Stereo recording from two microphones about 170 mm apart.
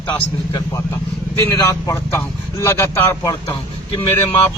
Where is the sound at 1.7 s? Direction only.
15° left (ahead or behind).